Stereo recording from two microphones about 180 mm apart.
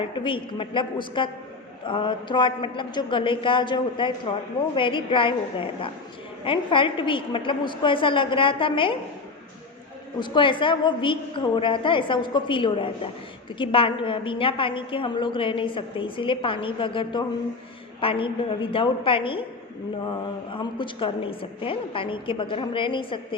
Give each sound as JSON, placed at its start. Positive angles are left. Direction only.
{"t": 0.2, "sound": "a woman's voice", "side_deg": 30}
{"t": 10.2, "sound": "a woman's voice", "side_deg": 25}
{"t": 20.5, "sound": "a woman's voice", "side_deg": 25}